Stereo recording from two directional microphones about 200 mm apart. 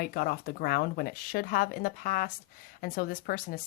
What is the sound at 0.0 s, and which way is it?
Speech, 45° left (ahead or behind).